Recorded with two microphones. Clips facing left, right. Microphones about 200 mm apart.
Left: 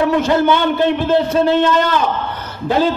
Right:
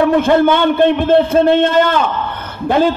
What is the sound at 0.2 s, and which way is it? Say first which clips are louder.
A man's voice: right 3 dB; 55° right (ahead or behind).